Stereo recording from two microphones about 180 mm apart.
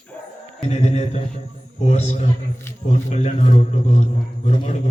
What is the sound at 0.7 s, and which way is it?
Speech, 40° left (ahead or behind).